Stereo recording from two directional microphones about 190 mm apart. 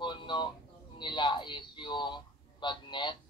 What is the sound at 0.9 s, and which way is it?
A man's voice, 25° left (ahead or behind).